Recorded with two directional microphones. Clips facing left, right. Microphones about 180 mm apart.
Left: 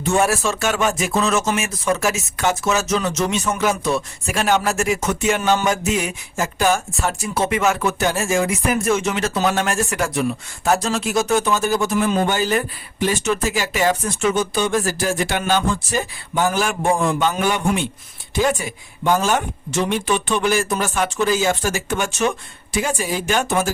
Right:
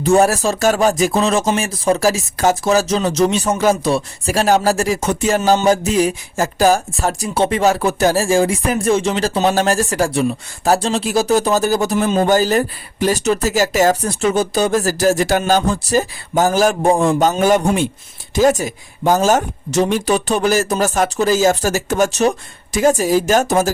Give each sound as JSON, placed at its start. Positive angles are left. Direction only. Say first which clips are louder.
{"t": 0.0, "sound": "speech", "louder": "right 5 dB", "side_deg": -35}
{"t": 18.3, "sound": "speech", "louder": "right 6 dB", "side_deg": -40}